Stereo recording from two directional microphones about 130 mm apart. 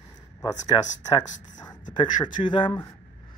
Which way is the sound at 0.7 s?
40° left (ahead or behind).